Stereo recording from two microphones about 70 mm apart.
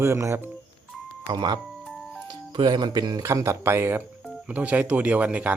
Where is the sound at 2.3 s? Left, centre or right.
Right.